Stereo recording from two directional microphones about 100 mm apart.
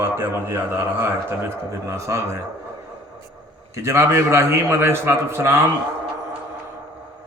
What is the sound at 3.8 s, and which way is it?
A man's voice, 25° right (ahead or behind).